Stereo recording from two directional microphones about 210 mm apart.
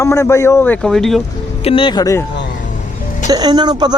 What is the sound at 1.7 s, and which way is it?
Speech, 25° left (ahead or behind).